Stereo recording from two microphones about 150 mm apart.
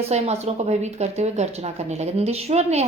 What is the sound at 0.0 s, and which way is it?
Speech, 45° right (ahead or behind).